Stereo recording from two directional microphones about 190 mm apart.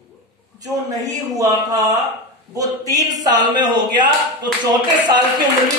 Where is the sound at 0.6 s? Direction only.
20° right (ahead or behind).